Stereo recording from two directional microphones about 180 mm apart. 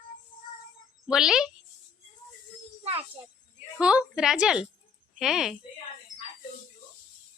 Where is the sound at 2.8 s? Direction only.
35° right (ahead or behind).